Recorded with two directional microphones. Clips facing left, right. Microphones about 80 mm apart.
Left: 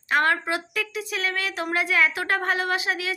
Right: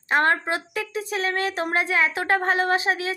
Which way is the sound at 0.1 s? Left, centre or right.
Right.